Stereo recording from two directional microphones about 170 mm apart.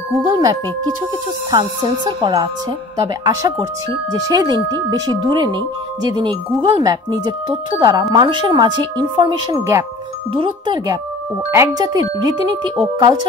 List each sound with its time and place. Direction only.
0.3 s speech: 25° right (ahead or behind)
6.6 s speech: 25° right (ahead or behind)
11.5 s speech: 20° right (ahead or behind)